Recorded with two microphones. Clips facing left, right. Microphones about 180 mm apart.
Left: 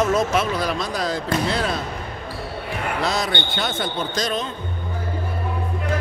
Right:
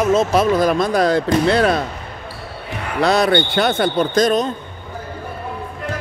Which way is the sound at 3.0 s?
60° right (ahead or behind).